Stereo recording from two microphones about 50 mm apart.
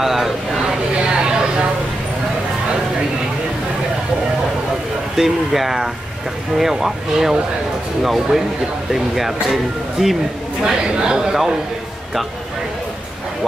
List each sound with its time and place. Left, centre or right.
0.0 s speech: centre
0.9 s a sound: centre
5.1 s speech: centre